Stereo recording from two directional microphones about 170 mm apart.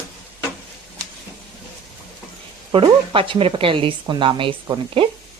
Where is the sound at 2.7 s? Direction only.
30° right (ahead or behind).